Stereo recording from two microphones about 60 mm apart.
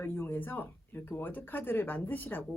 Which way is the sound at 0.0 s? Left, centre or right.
Left.